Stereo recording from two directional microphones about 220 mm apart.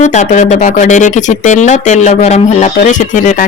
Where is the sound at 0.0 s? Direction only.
30° left (ahead or behind).